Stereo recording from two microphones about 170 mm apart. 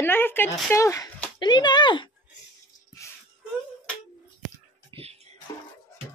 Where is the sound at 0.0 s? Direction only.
10° left (ahead or behind).